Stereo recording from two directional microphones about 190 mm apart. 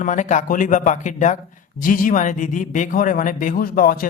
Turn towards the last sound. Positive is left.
turn(degrees=50)  # may be behind; listen again after turning